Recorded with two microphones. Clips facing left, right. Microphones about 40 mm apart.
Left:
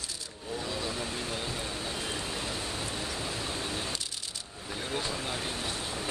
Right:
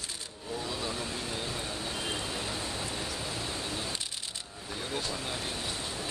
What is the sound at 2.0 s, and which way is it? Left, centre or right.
Rain, centre.